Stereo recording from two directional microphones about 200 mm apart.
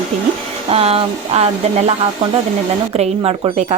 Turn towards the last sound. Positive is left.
turn(degrees=-30)  # may be behind; listen again after turning